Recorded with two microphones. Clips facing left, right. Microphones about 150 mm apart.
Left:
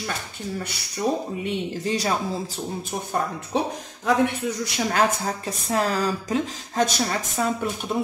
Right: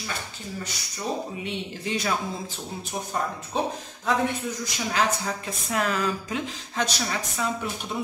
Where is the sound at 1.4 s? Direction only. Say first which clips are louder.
Left 5 dB; 35° left (ahead or behind).